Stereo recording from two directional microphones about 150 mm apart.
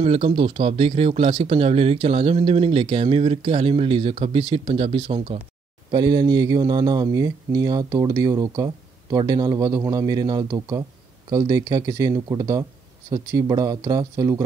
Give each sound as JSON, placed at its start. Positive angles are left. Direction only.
{"t": 0.0, "sound": "speech", "side_deg": -40}